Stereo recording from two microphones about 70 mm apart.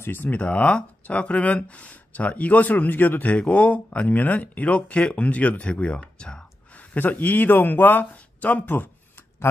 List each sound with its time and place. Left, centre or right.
0.0 s speech: left; by 6.4 s centre
6.9 s speech: left